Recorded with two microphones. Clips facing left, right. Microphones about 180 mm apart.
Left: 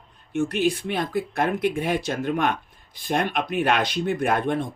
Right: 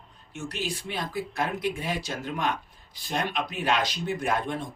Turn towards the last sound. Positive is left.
turn(degrees=60)  # may be behind; listen again after turning